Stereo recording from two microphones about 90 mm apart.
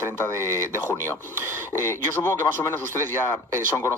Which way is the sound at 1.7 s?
30° left (ahead or behind).